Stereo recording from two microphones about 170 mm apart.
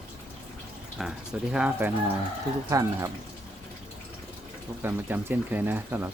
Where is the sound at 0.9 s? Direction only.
5° right (ahead or behind).